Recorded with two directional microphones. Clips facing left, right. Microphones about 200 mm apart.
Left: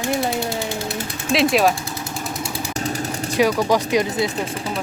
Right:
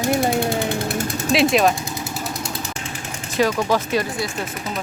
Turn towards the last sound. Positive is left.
turn(degrees=15)  # may be behind; listen again after turning